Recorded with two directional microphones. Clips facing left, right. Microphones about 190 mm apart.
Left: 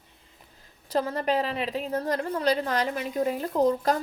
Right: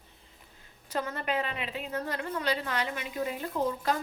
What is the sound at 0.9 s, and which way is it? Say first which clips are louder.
A woman's voice: left 6 dB; 35° left (ahead or behind).